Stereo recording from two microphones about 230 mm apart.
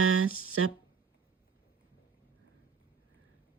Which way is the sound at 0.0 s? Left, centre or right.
Right.